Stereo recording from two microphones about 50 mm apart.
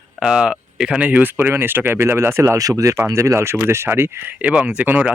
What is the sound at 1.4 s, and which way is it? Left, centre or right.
Speech, right.